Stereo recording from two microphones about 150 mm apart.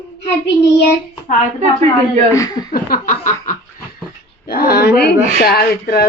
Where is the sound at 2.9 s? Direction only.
60° left (ahead or behind).